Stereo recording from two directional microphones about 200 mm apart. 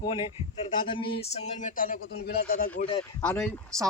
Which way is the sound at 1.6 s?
45° left (ahead or behind).